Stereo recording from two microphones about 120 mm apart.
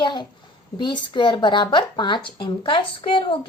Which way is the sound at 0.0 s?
40° left (ahead or behind).